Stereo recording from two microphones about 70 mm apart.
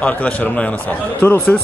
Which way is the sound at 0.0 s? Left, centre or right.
Left.